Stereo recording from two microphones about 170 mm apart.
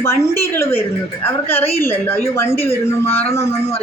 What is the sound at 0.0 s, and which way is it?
A woman's voice, 15° left (ahead or behind).